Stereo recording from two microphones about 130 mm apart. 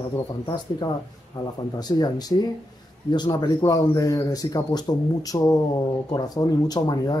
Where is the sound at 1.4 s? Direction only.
30° left (ahead or behind).